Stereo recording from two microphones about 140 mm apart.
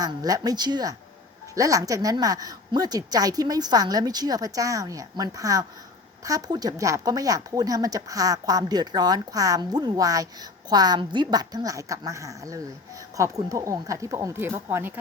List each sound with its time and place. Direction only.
0.0 s speech: 25° right (ahead or behind)